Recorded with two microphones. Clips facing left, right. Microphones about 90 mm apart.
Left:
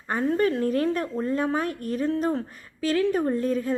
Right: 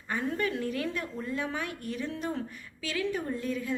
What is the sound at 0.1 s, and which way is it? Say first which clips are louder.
A woman's voice: left 8 dB; 40° left (ahead or behind).